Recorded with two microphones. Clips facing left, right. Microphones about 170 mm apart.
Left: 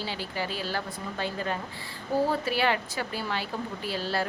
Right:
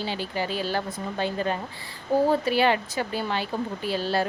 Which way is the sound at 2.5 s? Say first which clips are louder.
Right 5 dB; 20° right (ahead or behind).